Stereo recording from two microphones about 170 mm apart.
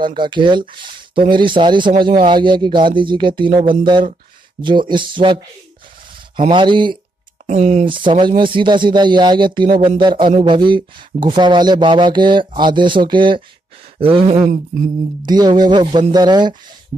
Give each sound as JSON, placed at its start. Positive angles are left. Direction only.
{"t": 0.0, "sound": "speech", "side_deg": -30}
{"t": 6.5, "sound": "speech", "side_deg": -30}
{"t": 7.4, "sound": "speech", "side_deg": -45}
{"t": 7.9, "sound": "speech", "side_deg": -30}